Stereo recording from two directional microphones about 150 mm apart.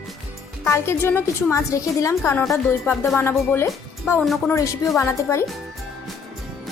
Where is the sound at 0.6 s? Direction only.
15° left (ahead or behind).